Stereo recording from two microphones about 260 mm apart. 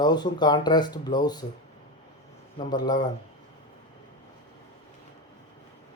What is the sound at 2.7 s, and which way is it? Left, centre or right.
Speech, centre.